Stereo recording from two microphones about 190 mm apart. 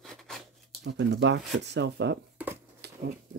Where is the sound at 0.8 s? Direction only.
65° right (ahead or behind).